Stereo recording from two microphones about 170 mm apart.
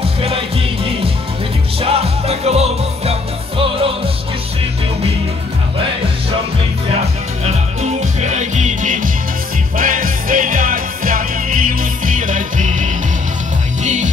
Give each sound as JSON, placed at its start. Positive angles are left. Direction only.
{"t": 1.8, "sound": "music", "side_deg": -35}
{"t": 7.4, "sound": "music", "side_deg": -40}